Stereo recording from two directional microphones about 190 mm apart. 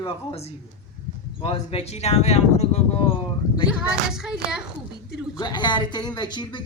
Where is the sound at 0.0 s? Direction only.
25° left (ahead or behind).